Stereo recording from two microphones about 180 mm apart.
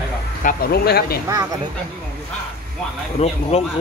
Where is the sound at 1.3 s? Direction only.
20° right (ahead or behind).